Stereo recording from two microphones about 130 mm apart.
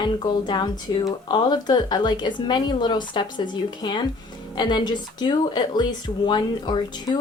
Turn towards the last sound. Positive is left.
turn(degrees=35)  # may be behind; listen again after turning